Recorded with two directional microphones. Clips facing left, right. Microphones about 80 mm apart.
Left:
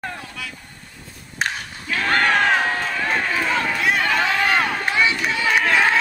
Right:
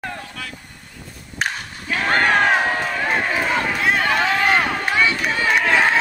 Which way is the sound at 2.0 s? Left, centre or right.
Centre.